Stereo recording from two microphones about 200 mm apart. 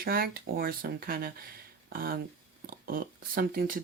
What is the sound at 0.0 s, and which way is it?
Speech, 45° right (ahead or behind).